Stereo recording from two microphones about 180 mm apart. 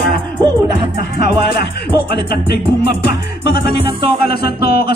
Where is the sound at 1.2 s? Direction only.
65° left (ahead or behind).